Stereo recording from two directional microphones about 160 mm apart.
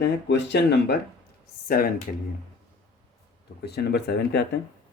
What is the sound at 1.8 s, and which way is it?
Speech, 70° left (ahead or behind).